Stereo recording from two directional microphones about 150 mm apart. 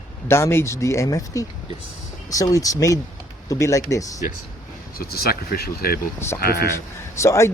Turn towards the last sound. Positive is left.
turn(degrees=20)  # may be behind; listen again after turning